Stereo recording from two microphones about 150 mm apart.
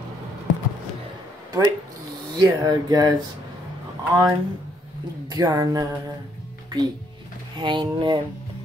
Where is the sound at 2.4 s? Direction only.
25° right (ahead or behind).